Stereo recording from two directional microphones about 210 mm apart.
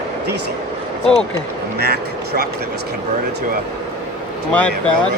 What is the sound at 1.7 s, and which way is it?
Speech, 50° right (ahead or behind).